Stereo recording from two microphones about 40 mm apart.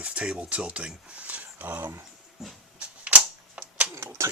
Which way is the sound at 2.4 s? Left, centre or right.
Centre.